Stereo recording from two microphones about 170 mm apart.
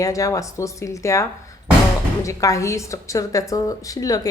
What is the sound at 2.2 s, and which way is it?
A woman's voice, 20° left (ahead or behind).